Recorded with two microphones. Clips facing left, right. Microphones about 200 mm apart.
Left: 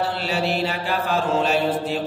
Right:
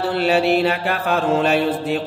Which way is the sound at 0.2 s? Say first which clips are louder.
Right 7 dB; 60° right (ahead or behind).